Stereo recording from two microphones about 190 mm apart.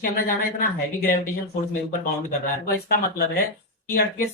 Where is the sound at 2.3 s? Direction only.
50° left (ahead or behind).